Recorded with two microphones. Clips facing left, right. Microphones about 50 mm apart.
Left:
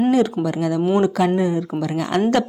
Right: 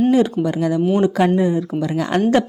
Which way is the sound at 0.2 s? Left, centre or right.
Right.